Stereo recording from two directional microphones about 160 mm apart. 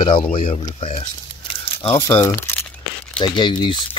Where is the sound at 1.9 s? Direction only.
15° left (ahead or behind).